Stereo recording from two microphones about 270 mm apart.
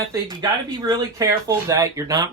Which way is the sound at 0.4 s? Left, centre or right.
Centre.